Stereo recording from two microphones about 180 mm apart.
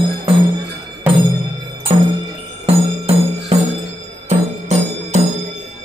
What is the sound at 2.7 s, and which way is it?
Music, 35° right (ahead or behind).